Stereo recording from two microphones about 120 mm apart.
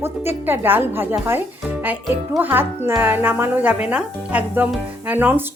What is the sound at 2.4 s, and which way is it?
Speech, 15° right (ahead or behind).